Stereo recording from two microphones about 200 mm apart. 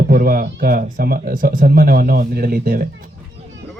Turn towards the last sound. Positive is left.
turn(degrees=-45)  # may be behind; listen again after turning